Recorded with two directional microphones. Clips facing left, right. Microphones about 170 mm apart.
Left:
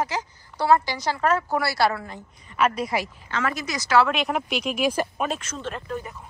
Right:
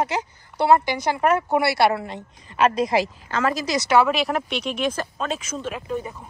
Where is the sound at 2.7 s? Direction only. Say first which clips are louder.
Right 6 dB; 90° right.